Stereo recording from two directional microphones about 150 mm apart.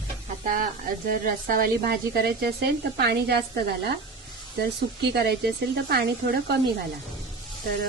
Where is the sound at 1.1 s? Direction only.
70° right (ahead or behind); by 3.9 s 90° right.